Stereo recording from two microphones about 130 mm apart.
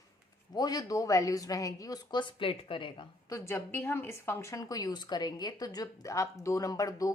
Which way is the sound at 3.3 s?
20° left (ahead or behind).